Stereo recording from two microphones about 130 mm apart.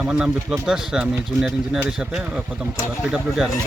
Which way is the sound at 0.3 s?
20° right (ahead or behind).